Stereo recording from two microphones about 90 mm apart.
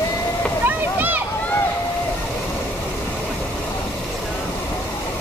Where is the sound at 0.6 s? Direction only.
20° right (ahead or behind).